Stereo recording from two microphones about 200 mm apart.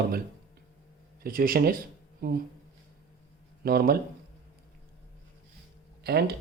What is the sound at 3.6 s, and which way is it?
Speech, 50° right (ahead or behind).